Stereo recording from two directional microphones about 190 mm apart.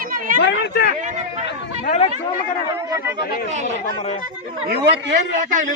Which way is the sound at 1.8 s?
40° left (ahead or behind).